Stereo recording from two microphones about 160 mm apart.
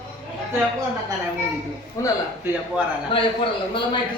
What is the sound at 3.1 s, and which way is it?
Speech, 35° left (ahead or behind).